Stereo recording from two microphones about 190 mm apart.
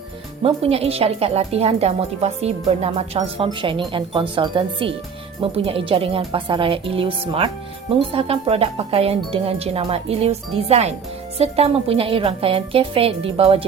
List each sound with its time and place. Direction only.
0.4 s a woman's voice: 30° right (ahead or behind)